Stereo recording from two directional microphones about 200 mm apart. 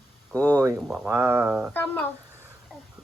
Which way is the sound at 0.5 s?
15° right (ahead or behind).